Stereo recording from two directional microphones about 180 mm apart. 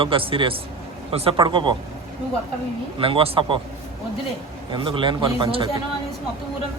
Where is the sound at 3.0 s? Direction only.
30° right (ahead or behind).